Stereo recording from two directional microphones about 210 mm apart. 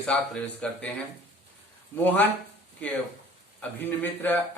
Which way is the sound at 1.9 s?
10° left (ahead or behind).